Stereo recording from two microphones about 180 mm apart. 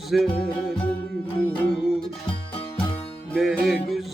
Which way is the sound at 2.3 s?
30° left (ahead or behind).